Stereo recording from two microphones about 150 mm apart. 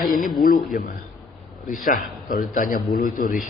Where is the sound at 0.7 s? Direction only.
65° left (ahead or behind).